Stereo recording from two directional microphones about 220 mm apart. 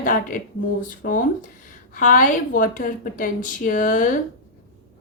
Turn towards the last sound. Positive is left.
turn(degrees=40)  # may be behind; listen again after turning